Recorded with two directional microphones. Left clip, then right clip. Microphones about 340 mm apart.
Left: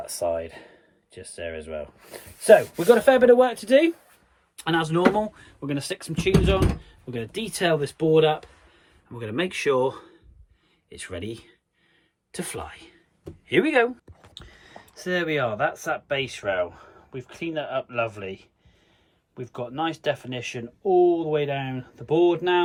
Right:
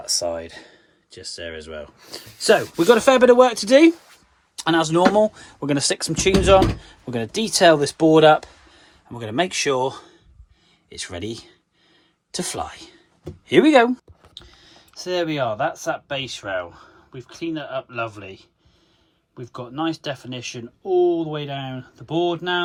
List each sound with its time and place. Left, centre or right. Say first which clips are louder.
0.0 s speech: right 2 dB; centre; by 8.4 s right
9.0 s speech: right 5 dB; centre
14.9 s speech: right 2 dB; centre
19.5 s speech: right 2 dB; centre